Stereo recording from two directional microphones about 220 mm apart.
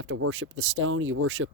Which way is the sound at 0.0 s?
65° right (ahead or behind).